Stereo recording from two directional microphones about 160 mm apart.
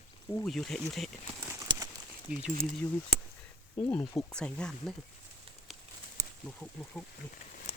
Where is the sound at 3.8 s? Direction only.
10° left (ahead or behind).